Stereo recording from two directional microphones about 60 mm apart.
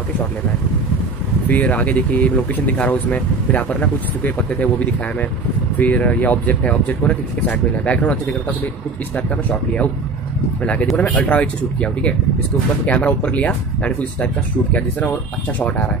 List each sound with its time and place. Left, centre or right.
1.5 s speech: left